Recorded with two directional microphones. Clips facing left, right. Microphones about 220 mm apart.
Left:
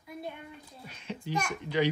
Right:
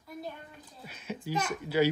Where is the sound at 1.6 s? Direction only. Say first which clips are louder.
Right 2 dB; 5° right (ahead or behind).